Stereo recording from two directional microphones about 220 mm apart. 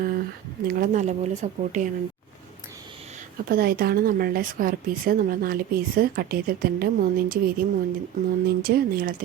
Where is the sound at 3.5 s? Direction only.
45° right (ahead or behind).